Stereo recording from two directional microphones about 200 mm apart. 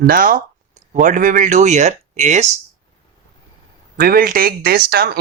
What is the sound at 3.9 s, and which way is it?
Speech, 45° right (ahead or behind).